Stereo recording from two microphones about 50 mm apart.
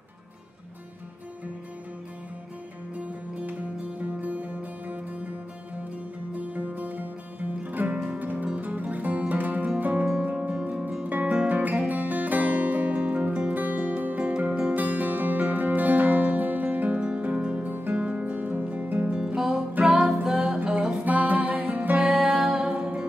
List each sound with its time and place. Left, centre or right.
4.0 s music: right
6.3 s music: right
19.1 s music: centre
21.0 s music: right